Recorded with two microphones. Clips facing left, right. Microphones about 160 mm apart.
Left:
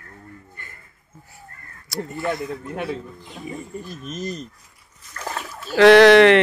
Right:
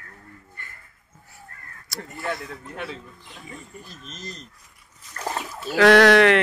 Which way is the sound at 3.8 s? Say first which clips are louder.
Left 10 dB; 50° left (ahead or behind).